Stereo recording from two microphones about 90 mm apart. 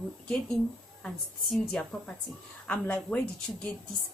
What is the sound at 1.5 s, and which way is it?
A woman's voice, 10° left (ahead or behind).